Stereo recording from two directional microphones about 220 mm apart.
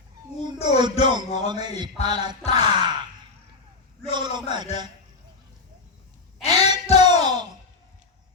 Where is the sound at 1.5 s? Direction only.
20° right (ahead or behind).